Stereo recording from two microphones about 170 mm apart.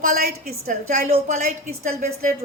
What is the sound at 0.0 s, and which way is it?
A woman's voice, 55° right (ahead or behind).